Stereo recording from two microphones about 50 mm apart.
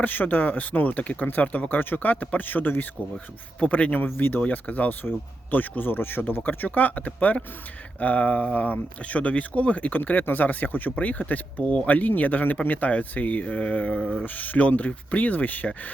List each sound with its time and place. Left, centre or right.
0.0 s speech: left
3.6 s a man's voice: left
4.0 s speech: left
14.3 s speech: left